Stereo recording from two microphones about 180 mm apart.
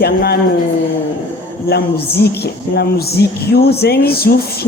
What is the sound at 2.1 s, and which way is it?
Speech, 65° left (ahead or behind).